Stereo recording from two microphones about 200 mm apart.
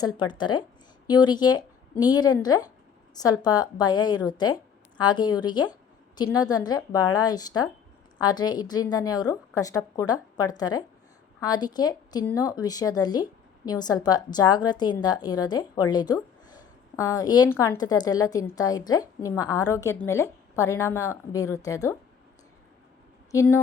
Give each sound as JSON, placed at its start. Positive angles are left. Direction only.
{"t": 0.0, "sound": "a woman's voice", "side_deg": 20}
{"t": 23.3, "sound": "a woman's voice", "side_deg": 15}